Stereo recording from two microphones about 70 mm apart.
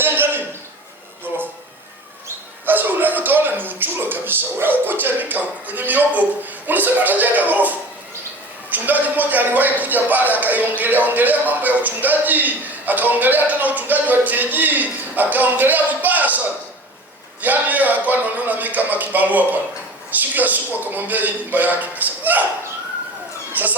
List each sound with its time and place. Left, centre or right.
0.0 s a sound: right
8.7 s a man's voice: right
17.4 s a man's voice: right
23.5 s speech: right